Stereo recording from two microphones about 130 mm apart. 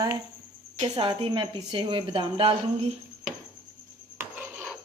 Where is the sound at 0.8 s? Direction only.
40° right (ahead or behind).